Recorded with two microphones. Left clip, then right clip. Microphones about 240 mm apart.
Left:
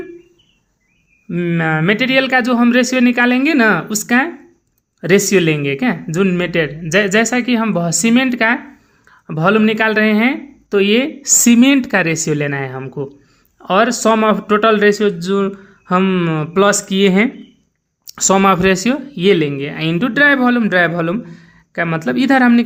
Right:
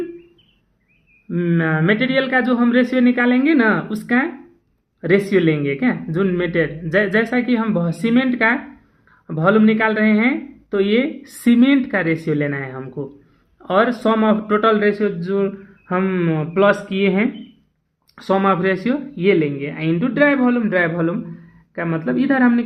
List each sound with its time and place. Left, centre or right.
1.3 s speech: left